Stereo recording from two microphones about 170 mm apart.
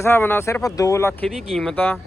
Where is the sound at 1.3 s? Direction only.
5° left (ahead or behind).